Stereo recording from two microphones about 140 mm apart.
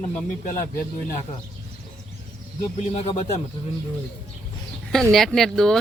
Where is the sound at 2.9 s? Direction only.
45° left (ahead or behind).